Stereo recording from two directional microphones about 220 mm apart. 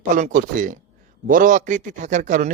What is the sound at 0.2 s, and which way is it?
Speech, 35° right (ahead or behind).